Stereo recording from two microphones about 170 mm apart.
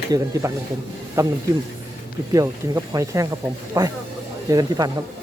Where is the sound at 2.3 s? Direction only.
20° right (ahead or behind).